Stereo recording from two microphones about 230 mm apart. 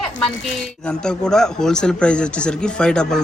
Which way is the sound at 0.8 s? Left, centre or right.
Centre.